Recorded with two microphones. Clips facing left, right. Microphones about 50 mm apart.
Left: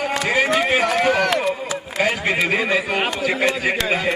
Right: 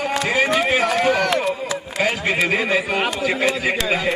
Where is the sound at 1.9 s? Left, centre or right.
Centre.